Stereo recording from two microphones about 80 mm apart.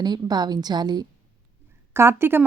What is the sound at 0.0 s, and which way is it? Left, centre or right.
A woman's voice, right.